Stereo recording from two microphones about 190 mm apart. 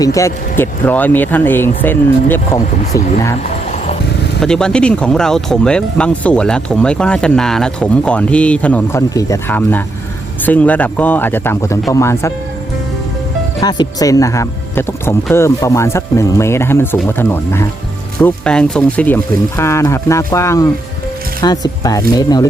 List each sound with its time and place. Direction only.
0.0 s speech: 15° left (ahead or behind)
4.4 s speech: 5° left (ahead or behind)
13.6 s speech: 20° left (ahead or behind)